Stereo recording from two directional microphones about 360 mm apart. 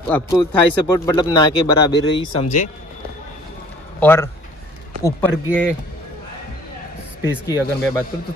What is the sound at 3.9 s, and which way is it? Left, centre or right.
Speech, centre.